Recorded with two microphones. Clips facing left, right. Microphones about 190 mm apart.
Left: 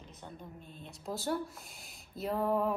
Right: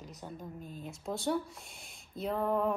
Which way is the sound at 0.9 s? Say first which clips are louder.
Right 2 dB; centre (ahead or behind).